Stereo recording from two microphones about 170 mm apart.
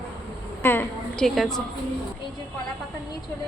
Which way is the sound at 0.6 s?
10° left (ahead or behind).